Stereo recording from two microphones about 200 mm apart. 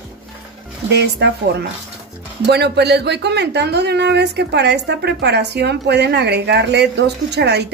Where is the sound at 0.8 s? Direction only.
55° right (ahead or behind).